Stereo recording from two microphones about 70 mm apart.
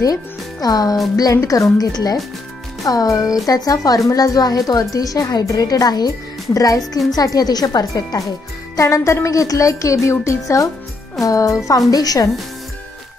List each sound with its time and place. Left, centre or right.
0.0 s speech: left
1.3 s a woman's voice: left
2.8 s a woman's voice: left
8.7 s a woman's voice: left